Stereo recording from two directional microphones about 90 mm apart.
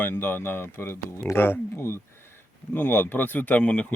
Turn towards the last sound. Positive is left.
turn(degrees=10)  # may be behind; listen again after turning